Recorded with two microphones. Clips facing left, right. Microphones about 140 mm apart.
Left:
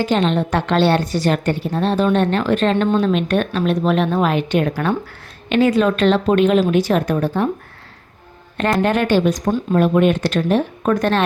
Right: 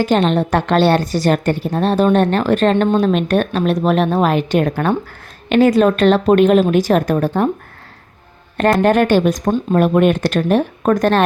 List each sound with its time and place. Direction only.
0.0 s a woman's voice: 45° right (ahead or behind)
8.5 s a woman's voice: 45° right (ahead or behind)